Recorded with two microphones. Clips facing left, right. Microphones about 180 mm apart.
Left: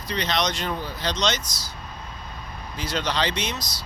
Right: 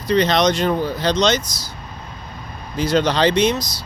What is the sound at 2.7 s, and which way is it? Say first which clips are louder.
Speech: right 9 dB; 40° right (ahead or behind).